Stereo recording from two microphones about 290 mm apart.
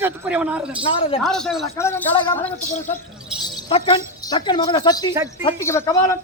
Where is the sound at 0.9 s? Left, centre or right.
Centre.